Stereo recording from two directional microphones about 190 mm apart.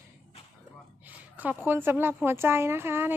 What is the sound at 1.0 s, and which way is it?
A woman's voice, 10° right (ahead or behind).